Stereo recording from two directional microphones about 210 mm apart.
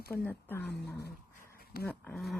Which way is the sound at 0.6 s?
50° left (ahead or behind).